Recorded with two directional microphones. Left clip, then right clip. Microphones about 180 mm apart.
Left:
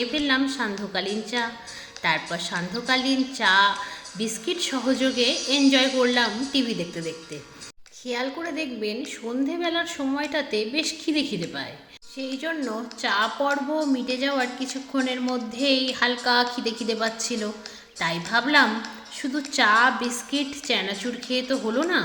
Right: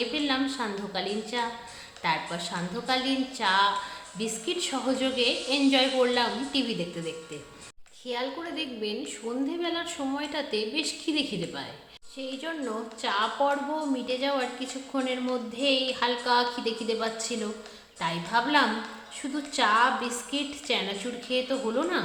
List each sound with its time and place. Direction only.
0.1 s a woman's voice: 20° left (ahead or behind)